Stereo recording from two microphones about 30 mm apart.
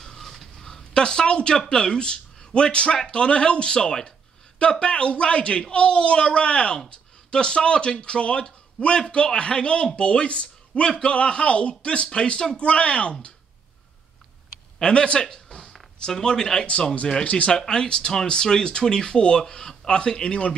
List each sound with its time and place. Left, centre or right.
0.0 s a sound: centre
0.9 s a man's voice: left
14.8 s speech: left
16.1 s speech: centre
17.2 s speech: left
17.5 s speech: left